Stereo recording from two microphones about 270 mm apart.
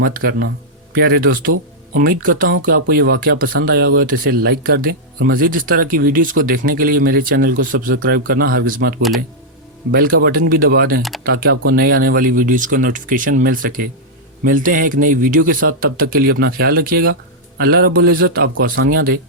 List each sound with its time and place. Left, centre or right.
0.0 s speech: right